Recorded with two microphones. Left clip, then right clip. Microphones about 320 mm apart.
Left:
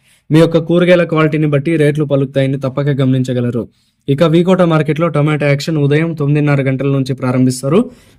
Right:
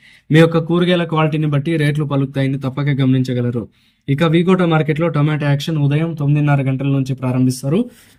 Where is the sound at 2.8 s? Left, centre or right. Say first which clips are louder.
Left 2 dB; left.